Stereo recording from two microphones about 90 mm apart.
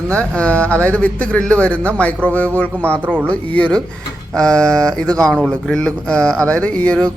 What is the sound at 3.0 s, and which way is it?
Speech, 20° right (ahead or behind).